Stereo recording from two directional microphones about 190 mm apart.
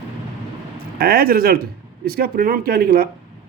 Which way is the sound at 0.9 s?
55° right (ahead or behind).